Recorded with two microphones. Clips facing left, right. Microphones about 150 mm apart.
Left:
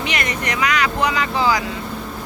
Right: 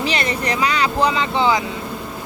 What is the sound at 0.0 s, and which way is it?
Speech, 30° right (ahead or behind).